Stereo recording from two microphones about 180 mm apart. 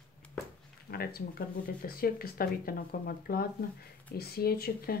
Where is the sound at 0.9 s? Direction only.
55° left (ahead or behind).